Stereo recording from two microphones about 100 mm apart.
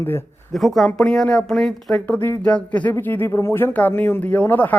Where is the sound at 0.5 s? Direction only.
Centre (ahead or behind).